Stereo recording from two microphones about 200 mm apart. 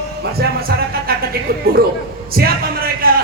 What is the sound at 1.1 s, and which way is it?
A man's voice, 50° right (ahead or behind).